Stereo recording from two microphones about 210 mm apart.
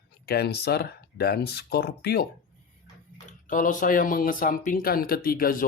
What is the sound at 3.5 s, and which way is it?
Speech, 40° left (ahead or behind).